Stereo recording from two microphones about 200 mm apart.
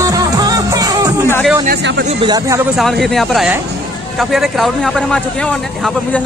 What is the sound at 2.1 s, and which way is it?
Speech, 20° right (ahead or behind).